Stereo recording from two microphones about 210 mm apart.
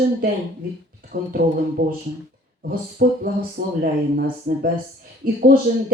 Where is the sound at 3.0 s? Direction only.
45° right (ahead or behind).